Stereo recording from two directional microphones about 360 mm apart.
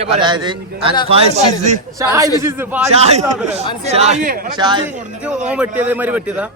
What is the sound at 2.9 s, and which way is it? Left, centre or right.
A man's voice, centre.